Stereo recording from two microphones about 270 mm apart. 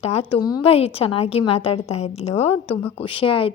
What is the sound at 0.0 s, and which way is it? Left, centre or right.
A woman's voice, left.